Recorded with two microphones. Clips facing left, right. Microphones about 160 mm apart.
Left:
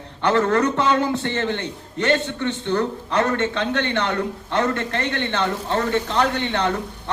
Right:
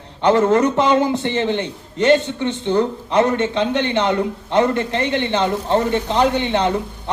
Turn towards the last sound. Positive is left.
turn(degrees=-15)  # may be behind; listen again after turning